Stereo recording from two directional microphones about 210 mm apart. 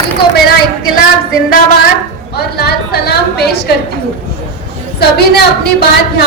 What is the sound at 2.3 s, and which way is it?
A woman's voice, 50° left (ahead or behind).